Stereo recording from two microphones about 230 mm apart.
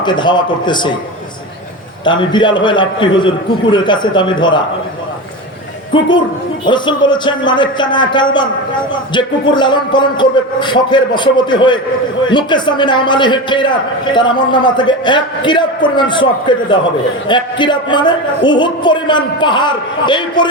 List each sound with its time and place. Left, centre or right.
0.0 s a man's voice: centre
2.0 s a man's voice: centre
6.7 s a man's voice: centre